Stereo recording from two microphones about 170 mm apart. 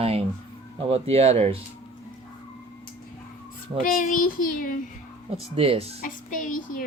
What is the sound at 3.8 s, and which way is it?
Speech, 55° left (ahead or behind).